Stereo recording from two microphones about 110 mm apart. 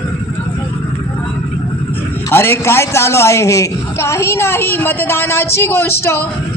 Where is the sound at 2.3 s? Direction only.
20° left (ahead or behind).